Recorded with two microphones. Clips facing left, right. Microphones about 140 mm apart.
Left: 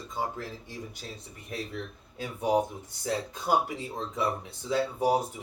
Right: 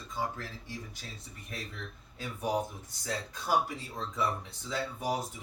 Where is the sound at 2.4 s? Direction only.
20° left (ahead or behind).